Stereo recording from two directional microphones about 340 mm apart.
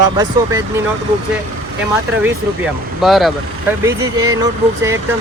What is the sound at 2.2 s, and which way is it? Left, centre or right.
Speech, centre.